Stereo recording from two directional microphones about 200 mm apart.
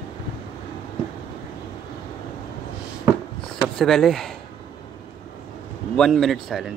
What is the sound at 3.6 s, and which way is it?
Speech, centre (ahead or behind).